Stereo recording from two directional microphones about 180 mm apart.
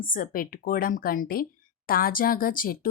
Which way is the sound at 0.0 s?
50° left (ahead or behind).